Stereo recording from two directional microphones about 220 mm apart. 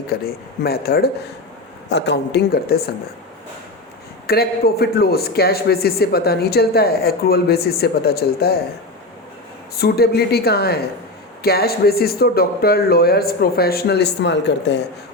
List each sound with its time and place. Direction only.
0.1 s a man's voice: 45° left (ahead or behind)
4.3 s a man's voice: 45° left (ahead or behind)
9.7 s a man's voice: 45° left (ahead or behind)